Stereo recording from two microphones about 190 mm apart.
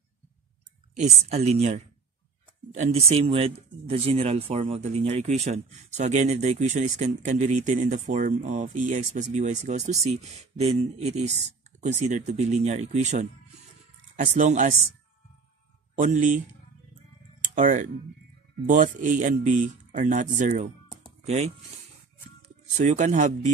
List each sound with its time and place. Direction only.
0.9 s speech: 35° right (ahead or behind)
16.0 s a man's voice: 40° right (ahead or behind)
17.6 s speech: 40° right (ahead or behind)
22.7 s speech: 40° right (ahead or behind)